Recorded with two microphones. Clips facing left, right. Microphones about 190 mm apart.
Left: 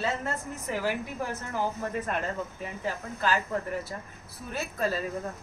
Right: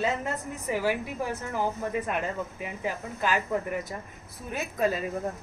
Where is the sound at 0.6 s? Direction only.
10° right (ahead or behind).